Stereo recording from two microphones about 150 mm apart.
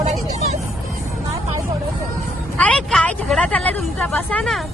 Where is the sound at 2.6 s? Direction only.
5° left (ahead or behind).